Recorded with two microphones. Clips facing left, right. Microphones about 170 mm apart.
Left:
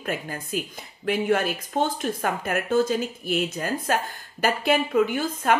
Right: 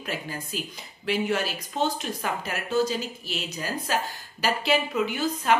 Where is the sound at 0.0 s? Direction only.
50° left (ahead or behind).